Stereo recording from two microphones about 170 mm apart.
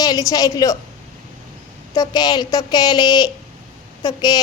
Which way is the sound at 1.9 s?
25° left (ahead or behind).